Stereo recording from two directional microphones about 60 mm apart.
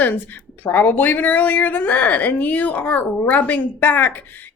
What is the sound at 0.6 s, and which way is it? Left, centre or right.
A woman's voice, left.